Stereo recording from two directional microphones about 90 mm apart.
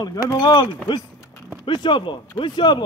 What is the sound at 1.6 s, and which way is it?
Speech, 65° left (ahead or behind).